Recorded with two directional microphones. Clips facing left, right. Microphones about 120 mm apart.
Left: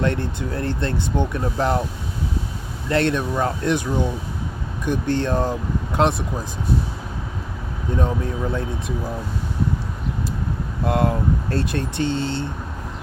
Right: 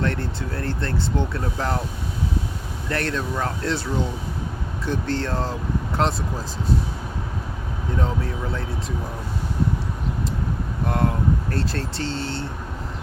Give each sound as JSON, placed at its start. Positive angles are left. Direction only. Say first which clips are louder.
{"t": 0.0, "sound": "speech", "louder": "left 3 dB", "side_deg": 20}
{"t": 2.9, "sound": "speech", "louder": "left 5 dB", "side_deg": 20}
{"t": 7.9, "sound": "speech", "louder": "left 3 dB", "side_deg": 20}
{"t": 10.8, "sound": "speech", "louder": "left 3 dB", "side_deg": 20}